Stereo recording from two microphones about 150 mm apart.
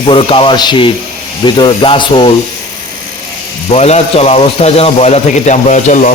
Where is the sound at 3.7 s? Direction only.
45° left (ahead or behind).